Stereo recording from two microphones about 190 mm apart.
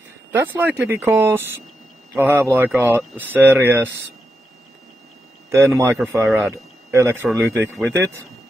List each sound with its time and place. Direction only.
0.3 s speech: 10° right (ahead or behind)
5.5 s speech: 15° right (ahead or behind)